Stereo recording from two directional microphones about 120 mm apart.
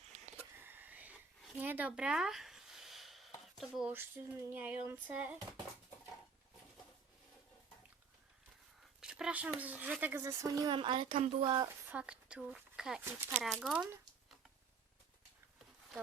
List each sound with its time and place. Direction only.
0.5 s a sound: 15° right (ahead or behind); by 3.8 s centre (ahead or behind)
3.8 s speech: 15° right (ahead or behind)
9.0 s speech: 5° right (ahead or behind); by 10.8 s 30° right (ahead or behind)
10.8 s speech: 45° right (ahead or behind)
11.6 s speech: 15° right (ahead or behind)
13.1 s speech: 20° right (ahead or behind)
13.4 s speech: centre (ahead or behind)